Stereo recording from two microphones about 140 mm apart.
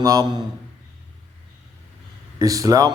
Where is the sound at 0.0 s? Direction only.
25° right (ahead or behind).